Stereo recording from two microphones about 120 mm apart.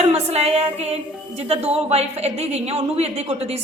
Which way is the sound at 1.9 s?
60° right (ahead or behind).